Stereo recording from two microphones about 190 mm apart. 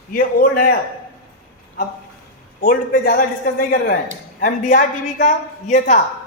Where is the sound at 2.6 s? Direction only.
50° left (ahead or behind).